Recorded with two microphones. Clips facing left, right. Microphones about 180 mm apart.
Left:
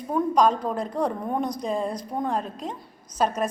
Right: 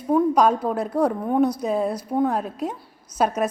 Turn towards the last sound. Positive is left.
turn(degrees=-10)  # may be behind; listen again after turning